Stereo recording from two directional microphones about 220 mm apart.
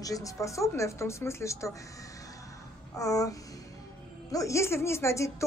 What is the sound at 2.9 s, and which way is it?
Speech, 15° left (ahead or behind).